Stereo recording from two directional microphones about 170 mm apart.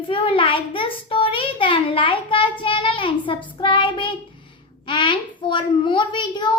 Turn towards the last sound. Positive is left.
turn(degrees=25)  # may be behind; listen again after turning